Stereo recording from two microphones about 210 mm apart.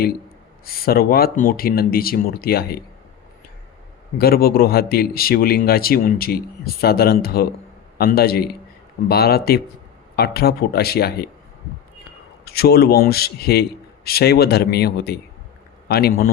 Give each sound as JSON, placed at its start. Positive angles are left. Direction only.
{"t": 0.6, "sound": "a man's voice", "side_deg": 45}
{"t": 4.2, "sound": "a man's voice", "side_deg": 45}
{"t": 12.5, "sound": "a man's voice", "side_deg": 50}